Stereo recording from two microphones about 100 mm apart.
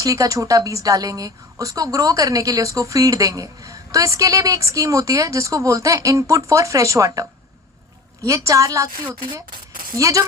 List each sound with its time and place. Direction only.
0.0 s a woman's voice: 35° right (ahead or behind)
9.9 s a woman's voice: 35° right (ahead or behind)